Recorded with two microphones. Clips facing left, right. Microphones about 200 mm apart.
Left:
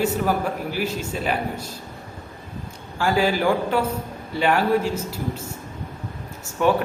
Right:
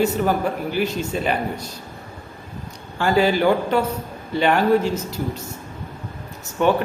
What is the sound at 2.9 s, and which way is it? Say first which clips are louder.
A man's voice: right 3 dB; 5° left (ahead or behind).